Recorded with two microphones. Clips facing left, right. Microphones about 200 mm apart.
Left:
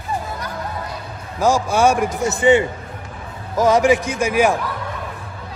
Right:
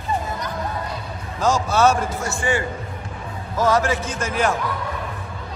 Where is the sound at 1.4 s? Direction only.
10° left (ahead or behind).